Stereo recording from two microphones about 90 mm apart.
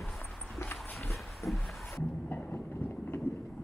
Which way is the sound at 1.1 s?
Centre (ahead or behind).